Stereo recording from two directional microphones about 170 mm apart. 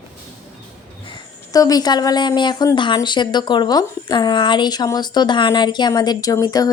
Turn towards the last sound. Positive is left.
turn(degrees=20)  # may be behind; listen again after turning